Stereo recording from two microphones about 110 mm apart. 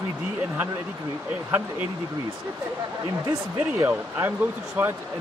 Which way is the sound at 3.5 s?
20° right (ahead or behind).